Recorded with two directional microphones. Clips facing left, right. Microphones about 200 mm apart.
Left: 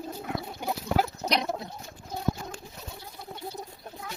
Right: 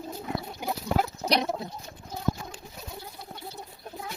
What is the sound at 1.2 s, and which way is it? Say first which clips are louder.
Bird: right 2 dB; 5° right (ahead or behind).